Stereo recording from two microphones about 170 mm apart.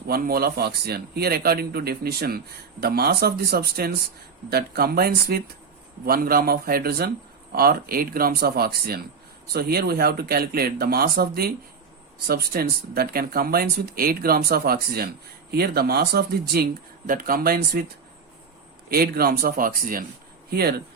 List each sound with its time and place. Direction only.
0.1 s speech: 60° right (ahead or behind)
18.9 s speech: 65° right (ahead or behind)